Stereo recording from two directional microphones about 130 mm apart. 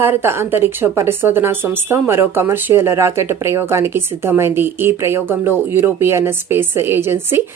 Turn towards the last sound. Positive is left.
turn(degrees=-20)  # may be behind; listen again after turning